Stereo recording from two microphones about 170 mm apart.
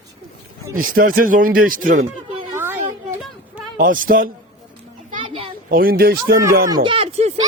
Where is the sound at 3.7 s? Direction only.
55° right (ahead or behind).